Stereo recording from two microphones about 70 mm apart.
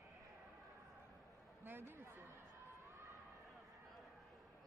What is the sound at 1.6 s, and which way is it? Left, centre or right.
Speech, right.